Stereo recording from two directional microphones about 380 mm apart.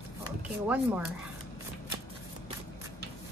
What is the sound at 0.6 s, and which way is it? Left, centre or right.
Speech, centre.